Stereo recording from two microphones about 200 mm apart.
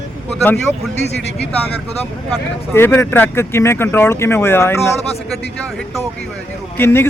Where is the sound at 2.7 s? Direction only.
10° left (ahead or behind).